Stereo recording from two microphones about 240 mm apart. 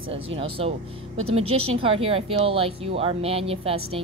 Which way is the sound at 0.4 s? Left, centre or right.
Right.